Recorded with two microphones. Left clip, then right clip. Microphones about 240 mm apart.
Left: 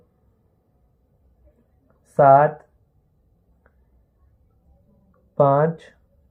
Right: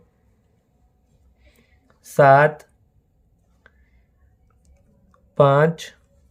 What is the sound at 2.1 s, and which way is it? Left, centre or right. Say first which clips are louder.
Speech: even; right.